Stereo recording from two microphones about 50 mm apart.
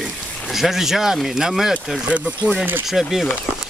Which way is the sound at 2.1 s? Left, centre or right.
Right.